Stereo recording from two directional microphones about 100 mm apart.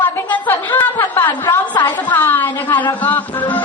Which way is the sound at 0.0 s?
20° left (ahead or behind).